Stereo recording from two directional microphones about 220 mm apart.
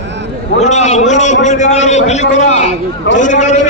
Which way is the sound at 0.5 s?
30° left (ahead or behind).